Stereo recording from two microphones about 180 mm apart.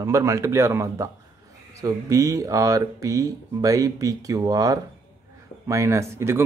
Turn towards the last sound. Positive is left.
turn(degrees=-15)  # may be behind; listen again after turning